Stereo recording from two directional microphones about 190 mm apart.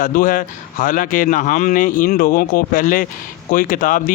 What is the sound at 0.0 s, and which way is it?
Speech, 45° left (ahead or behind).